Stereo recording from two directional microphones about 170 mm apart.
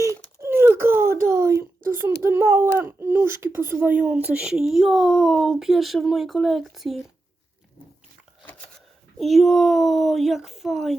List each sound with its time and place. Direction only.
0.4 s a sound: 15° right (ahead or behind)
3.8 s speech: 10° right (ahead or behind)
9.1 s speech: centre (ahead or behind)